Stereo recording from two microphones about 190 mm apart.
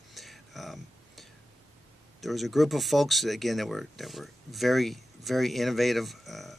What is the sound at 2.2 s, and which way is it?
Speech, centre (ahead or behind).